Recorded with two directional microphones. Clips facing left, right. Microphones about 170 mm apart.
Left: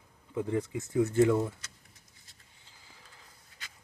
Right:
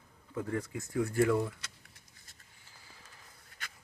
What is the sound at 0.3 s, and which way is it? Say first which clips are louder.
Speech: left 4 dB; 20° left (ahead or behind).